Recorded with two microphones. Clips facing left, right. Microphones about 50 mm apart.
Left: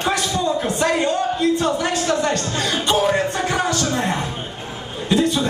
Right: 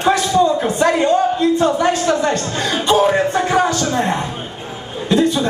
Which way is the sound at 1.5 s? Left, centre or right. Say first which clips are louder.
Right 5 dB; centre.